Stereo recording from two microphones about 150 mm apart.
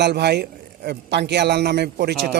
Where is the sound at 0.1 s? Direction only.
90° right.